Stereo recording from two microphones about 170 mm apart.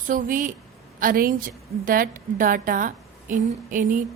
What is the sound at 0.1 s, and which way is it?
A woman's voice, 50° right (ahead or behind).